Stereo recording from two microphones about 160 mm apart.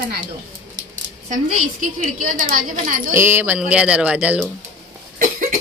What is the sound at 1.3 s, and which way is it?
A woman's voice, 55° right (ahead or behind).